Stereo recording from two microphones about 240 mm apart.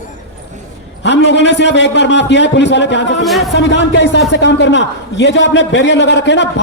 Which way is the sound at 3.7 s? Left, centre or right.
Left.